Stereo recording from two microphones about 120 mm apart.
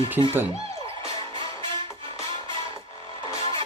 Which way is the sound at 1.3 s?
40° right (ahead or behind).